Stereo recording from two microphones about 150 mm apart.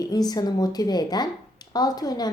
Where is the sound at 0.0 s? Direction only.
25° left (ahead or behind).